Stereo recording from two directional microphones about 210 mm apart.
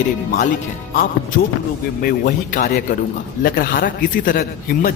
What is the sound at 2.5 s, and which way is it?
A man's voice, 45° left (ahead or behind).